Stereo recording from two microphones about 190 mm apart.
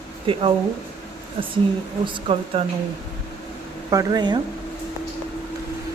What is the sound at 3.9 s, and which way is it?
Speech, 20° right (ahead or behind).